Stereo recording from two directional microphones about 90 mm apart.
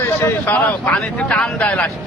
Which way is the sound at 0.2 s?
20° left (ahead or behind).